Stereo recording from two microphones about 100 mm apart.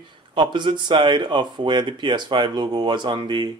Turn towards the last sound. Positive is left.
turn(degrees=-50)  # may be behind; listen again after turning